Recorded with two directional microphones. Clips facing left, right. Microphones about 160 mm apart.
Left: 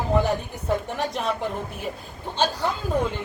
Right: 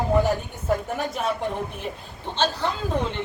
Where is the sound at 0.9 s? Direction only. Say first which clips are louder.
Even; centre (ahead or behind).